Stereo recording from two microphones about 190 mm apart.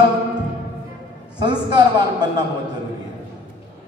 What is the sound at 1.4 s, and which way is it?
Speech, 25° right (ahead or behind).